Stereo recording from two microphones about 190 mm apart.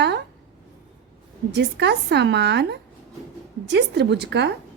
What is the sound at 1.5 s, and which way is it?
A woman's voice, 65° right (ahead or behind).